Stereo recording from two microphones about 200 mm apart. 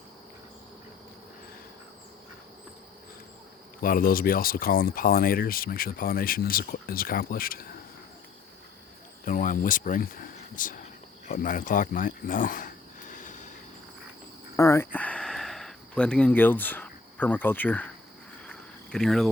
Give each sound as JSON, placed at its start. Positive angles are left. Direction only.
{"t": 3.8, "sound": "speech", "side_deg": 45}
{"t": 9.2, "sound": "speech", "side_deg": 40}
{"t": 13.1, "sound": "vehicle", "side_deg": 40}
{"t": 14.5, "sound": "a sound", "side_deg": 15}
{"t": 18.4, "sound": "cricket", "side_deg": 5}